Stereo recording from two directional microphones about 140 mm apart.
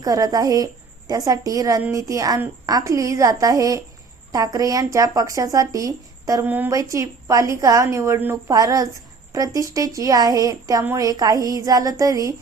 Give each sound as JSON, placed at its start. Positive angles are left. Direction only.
{"t": 0.0, "sound": "a woman's voice", "side_deg": -25}